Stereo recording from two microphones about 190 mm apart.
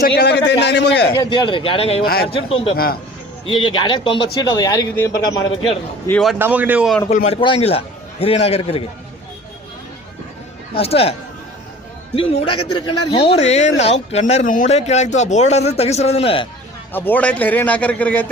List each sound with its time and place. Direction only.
0.0 s a man's voice: 55° left (ahead or behind)
1.1 s a man's voice: 20° left (ahead or behind)
2.7 s a man's voice: 50° left (ahead or behind)
3.4 s a man's voice: 25° left (ahead or behind)
6.1 s a man's voice: 5° left (ahead or behind)
6.4 s speech: 10° right (ahead or behind)
7.1 s speech: 35° left (ahead or behind)
10.8 s speech: 30° left (ahead or behind)
12.1 s speech: 30° left (ahead or behind)
16.9 s a man's voice: 10° left (ahead or behind)